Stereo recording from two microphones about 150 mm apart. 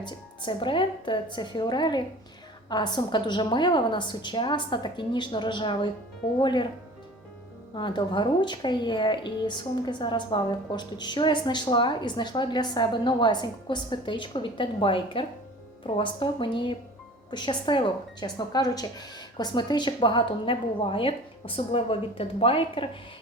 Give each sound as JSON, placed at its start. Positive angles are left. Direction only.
{"t": 0.0, "sound": "speech", "side_deg": 30}
{"t": 7.8, "sound": "speech", "side_deg": 30}